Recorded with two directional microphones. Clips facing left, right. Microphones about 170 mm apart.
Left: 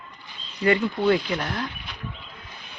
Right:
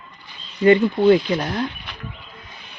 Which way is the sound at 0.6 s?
25° right (ahead or behind).